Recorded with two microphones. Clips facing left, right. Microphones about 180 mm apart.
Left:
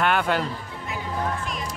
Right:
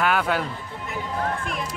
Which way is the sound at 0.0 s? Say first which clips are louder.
Even; centre (ahead or behind).